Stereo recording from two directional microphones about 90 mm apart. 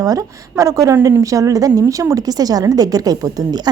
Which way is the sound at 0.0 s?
40° right (ahead or behind).